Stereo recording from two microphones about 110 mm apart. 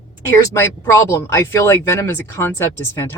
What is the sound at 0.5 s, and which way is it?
Speech, 25° left (ahead or behind).